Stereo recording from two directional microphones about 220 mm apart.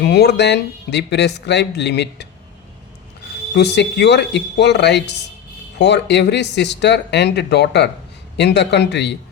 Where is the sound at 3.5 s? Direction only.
50° left (ahead or behind).